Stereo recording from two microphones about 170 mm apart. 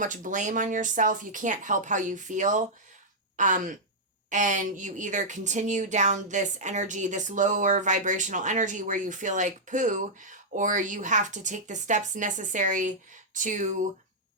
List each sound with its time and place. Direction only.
0.0 s speech: 50° right (ahead or behind)